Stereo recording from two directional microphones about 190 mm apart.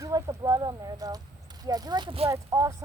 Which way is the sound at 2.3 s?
15° right (ahead or behind).